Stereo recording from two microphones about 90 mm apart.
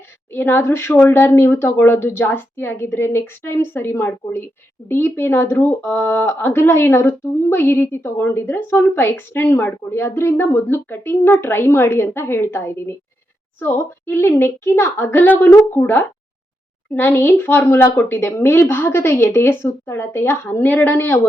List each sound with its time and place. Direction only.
0.3 s speech: 25° left (ahead or behind)